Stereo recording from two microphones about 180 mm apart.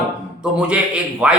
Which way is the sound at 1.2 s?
5° right (ahead or behind).